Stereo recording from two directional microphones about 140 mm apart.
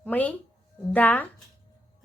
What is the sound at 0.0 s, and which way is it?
A woman's voice, 10° left (ahead or behind).